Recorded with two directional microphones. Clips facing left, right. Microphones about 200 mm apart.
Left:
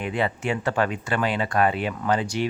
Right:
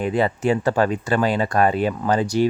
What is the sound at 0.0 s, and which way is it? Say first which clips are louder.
Speech: right 6 dB; 35° right (ahead or behind).